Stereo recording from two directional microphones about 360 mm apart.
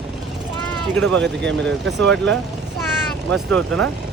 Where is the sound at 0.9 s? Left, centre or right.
Centre.